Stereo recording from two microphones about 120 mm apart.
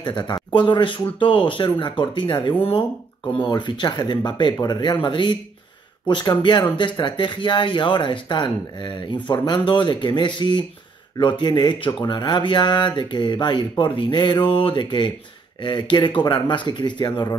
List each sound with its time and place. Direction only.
0.0 s speech: 40° left (ahead or behind)